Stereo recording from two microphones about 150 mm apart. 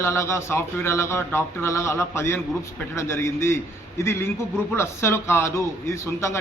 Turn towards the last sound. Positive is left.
turn(degrees=15)  # may be behind; listen again after turning